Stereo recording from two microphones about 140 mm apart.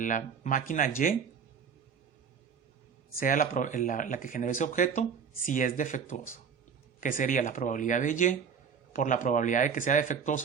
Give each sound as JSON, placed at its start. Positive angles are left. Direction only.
{"t": 0.0, "sound": "speech", "side_deg": 70}
{"t": 3.2, "sound": "speech", "side_deg": 90}